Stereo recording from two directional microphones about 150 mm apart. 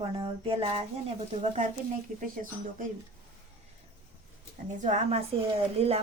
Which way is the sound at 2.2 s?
65° right (ahead or behind).